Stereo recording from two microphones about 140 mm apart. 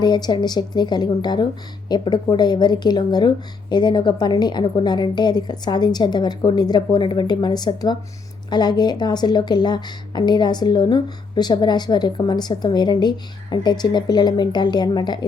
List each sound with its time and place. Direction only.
0.0 s speech: 30° left (ahead or behind)